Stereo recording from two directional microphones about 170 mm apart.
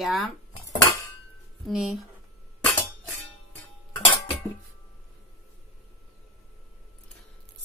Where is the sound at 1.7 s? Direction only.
5° right (ahead or behind).